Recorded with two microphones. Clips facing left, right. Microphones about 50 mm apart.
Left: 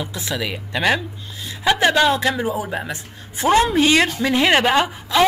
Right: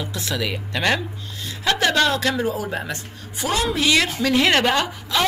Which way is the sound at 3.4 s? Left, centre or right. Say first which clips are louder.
Left 6 dB; left.